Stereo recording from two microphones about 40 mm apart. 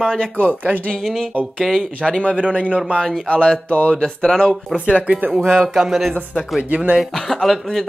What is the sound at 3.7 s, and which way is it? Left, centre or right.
Speech, left.